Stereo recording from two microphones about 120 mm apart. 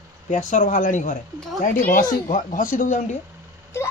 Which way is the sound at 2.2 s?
90° left.